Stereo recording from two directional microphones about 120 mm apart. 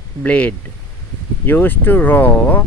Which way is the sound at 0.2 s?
10° left (ahead or behind).